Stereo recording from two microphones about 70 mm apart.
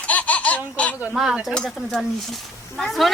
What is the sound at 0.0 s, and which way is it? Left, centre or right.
Laughter, left.